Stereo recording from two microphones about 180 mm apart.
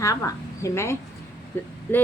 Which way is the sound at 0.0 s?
15° left (ahead or behind).